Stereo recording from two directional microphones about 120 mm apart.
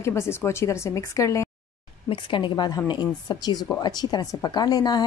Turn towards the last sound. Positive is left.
turn(degrees=35)  # may be behind; listen again after turning